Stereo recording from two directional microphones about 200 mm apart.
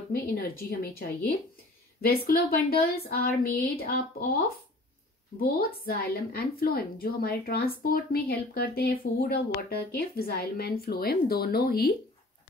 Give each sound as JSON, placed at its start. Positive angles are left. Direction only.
{"t": 0.1, "sound": "speech", "side_deg": 50}
{"t": 5.9, "sound": "speech", "side_deg": 50}